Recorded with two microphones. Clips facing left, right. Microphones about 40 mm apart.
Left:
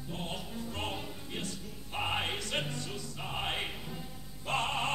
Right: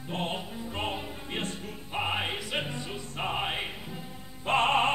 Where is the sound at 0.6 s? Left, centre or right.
Right.